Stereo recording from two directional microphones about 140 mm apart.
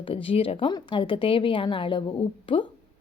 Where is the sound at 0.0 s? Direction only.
40° left (ahead or behind).